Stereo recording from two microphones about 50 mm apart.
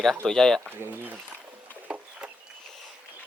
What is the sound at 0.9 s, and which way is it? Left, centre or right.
Speech, right.